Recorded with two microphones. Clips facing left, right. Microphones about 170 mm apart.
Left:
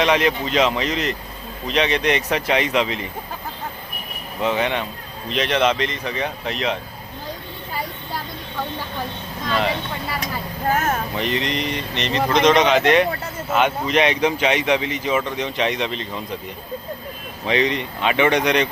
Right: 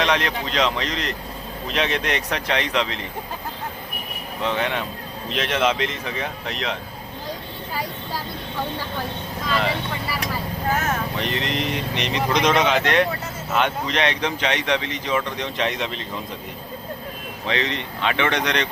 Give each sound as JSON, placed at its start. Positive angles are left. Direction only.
{"t": 0.0, "sound": "speech", "side_deg": 5}
{"t": 4.4, "sound": "speech", "side_deg": 0}
{"t": 9.5, "sound": "speech", "side_deg": 0}
{"t": 11.2, "sound": "speech", "side_deg": 0}
{"t": 17.4, "sound": "speech", "side_deg": 15}